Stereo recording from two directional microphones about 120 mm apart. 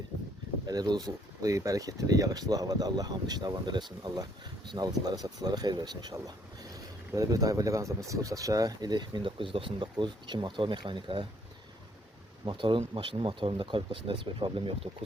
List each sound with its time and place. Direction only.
0.7 s speech: 35° right (ahead or behind)
12.5 s speech: 45° right (ahead or behind)